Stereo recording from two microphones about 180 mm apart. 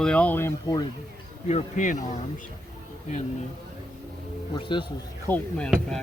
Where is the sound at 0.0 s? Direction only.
5° left (ahead or behind).